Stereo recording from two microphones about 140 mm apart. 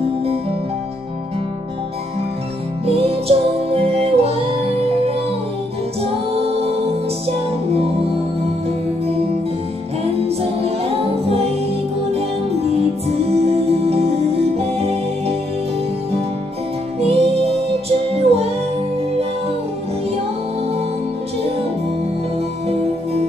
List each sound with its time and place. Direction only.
2.9 s music: 45° right (ahead or behind)
9.0 s music: 45° right (ahead or behind)
17.0 s music: 45° right (ahead or behind)